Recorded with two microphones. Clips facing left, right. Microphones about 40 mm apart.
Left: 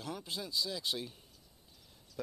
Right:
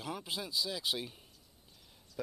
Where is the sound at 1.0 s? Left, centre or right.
Centre.